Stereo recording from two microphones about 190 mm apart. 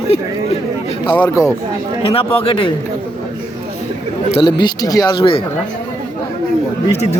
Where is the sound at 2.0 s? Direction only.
30° left (ahead or behind).